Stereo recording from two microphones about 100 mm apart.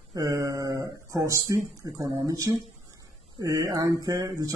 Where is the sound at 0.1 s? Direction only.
40° right (ahead or behind).